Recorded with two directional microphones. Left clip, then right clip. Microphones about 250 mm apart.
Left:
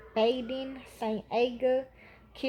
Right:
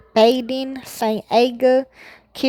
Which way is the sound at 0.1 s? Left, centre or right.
Right.